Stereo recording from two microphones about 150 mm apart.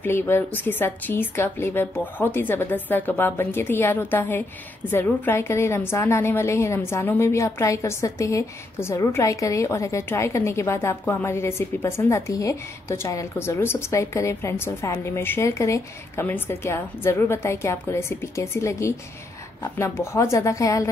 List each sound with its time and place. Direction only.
0.0 s a woman's voice: 15° left (ahead or behind)